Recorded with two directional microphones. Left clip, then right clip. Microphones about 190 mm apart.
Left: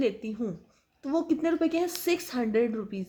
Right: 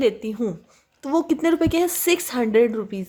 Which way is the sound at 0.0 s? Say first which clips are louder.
Right 8 dB; 25° right (ahead or behind).